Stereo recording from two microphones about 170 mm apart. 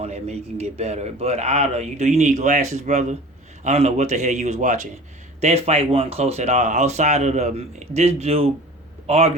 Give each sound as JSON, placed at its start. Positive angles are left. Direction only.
{"t": 0.0, "sound": "a man's voice", "side_deg": -40}